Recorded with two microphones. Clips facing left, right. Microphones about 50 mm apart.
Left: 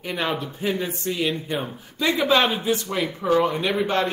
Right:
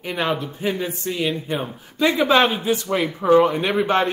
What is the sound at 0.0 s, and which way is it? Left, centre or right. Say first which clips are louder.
A man's voice: right 3 dB; centre.